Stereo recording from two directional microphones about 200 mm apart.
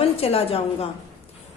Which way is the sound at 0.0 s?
30° left (ahead or behind).